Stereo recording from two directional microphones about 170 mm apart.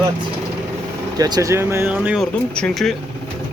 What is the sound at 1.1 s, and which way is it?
Speech, 20° right (ahead or behind).